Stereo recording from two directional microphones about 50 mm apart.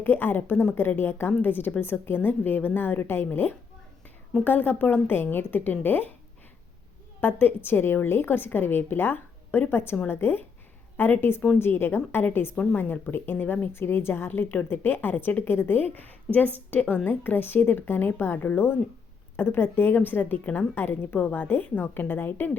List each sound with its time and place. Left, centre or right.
0.0 s a woman's voice: left
4.4 s speech: left
7.2 s a woman's voice: left
13.7 s a woman's voice: left
20.7 s a woman's voice: left